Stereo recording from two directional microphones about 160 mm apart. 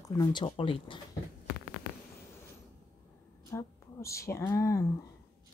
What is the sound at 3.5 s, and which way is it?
Speech, 20° left (ahead or behind).